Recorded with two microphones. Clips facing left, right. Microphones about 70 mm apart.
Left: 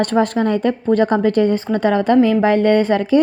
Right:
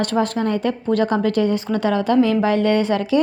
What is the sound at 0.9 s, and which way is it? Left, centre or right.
Speech, left.